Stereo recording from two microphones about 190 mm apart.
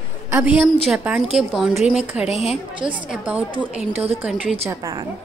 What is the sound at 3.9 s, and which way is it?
Speech, 30° right (ahead or behind).